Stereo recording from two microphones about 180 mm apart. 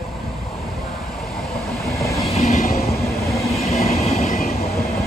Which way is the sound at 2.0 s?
15° left (ahead or behind).